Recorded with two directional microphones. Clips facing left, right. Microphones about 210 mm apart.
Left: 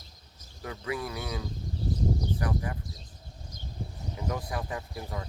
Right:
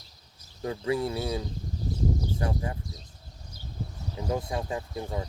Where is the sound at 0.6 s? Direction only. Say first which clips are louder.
Right 6 dB; 30° right (ahead or behind).